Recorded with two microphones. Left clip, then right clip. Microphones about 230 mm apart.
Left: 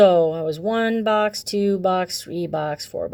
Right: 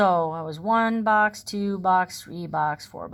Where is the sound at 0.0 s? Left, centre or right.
Left.